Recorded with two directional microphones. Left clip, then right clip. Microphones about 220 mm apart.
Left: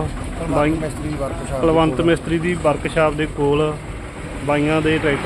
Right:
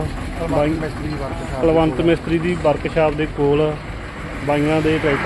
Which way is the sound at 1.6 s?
Centre (ahead or behind).